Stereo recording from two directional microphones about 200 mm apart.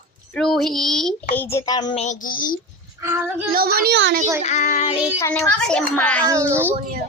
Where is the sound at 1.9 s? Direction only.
35° left (ahead or behind).